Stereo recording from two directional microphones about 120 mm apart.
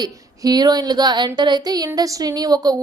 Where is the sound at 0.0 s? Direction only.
35° right (ahead or behind).